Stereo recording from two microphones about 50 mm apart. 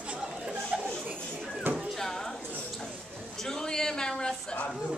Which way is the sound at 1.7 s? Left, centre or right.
Right.